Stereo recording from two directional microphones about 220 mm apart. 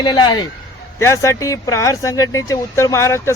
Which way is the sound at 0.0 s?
20° left (ahead or behind).